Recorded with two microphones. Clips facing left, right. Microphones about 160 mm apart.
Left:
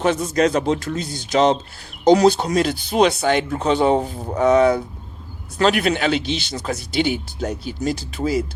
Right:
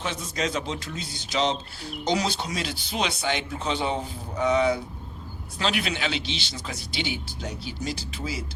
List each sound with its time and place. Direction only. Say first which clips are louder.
0.0 s speech: left 12 dB; 60° left (ahead or behind)